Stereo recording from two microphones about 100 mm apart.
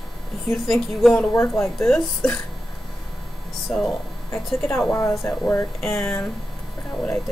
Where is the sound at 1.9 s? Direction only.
10° left (ahead or behind).